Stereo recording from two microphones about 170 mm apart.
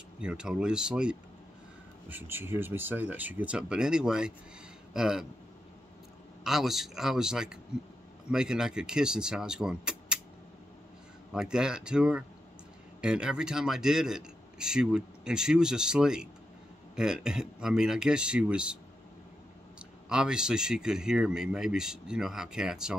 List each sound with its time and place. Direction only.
0.2 s a man's voice: 5° right (ahead or behind)
6.4 s a man's voice: centre (ahead or behind)
11.3 s a man's voice: 5° right (ahead or behind)
20.1 s a man's voice: 5° right (ahead or behind)